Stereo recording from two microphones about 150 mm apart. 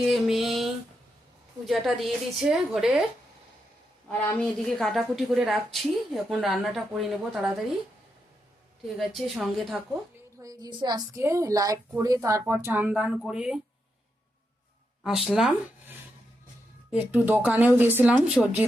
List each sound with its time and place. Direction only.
0.0 s a sound: centre (ahead or behind)
1.6 s a woman's voice: centre (ahead or behind)
4.1 s a woman's voice: 5° left (ahead or behind)
9.0 s a woman's voice: centre (ahead or behind)
10.4 s a woman's voice: 25° right (ahead or behind); by 13.6 s 5° right (ahead or behind)
15.0 s a woman's voice: centre (ahead or behind)
16.9 s speech: 10° right (ahead or behind)